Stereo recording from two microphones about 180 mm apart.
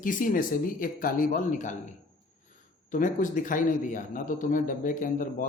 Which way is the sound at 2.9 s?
45° left (ahead or behind).